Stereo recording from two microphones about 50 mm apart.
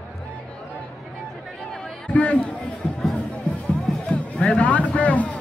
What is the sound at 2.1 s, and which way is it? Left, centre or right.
Speech, left.